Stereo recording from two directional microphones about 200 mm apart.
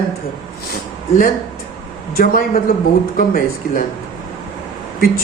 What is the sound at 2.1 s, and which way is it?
Speech, 45° left (ahead or behind).